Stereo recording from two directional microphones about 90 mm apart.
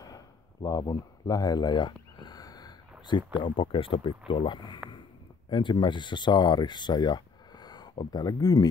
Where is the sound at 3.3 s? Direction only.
70° left (ahead or behind).